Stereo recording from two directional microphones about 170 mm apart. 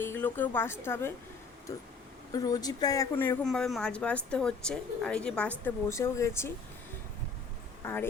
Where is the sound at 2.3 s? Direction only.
20° left (ahead or behind).